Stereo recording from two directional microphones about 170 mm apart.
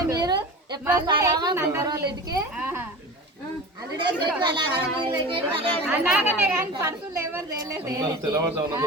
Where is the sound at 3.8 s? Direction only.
25° right (ahead or behind).